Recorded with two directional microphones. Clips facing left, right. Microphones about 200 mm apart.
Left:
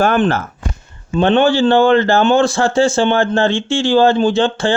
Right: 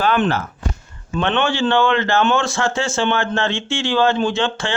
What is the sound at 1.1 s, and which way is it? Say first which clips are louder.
A man's voice: left 7 dB; 35° left (ahead or behind).